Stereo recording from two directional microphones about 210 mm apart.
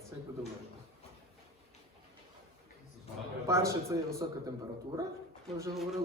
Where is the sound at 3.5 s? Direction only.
15° right (ahead or behind).